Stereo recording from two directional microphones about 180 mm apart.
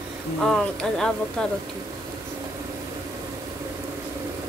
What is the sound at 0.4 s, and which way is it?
Speech, centre (ahead or behind).